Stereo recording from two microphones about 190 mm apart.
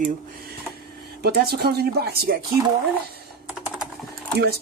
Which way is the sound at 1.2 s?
55° right (ahead or behind).